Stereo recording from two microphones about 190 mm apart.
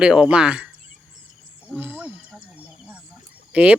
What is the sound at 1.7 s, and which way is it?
Wild animals, 10° right (ahead or behind).